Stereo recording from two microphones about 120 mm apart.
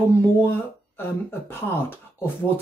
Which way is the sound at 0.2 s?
15° left (ahead or behind).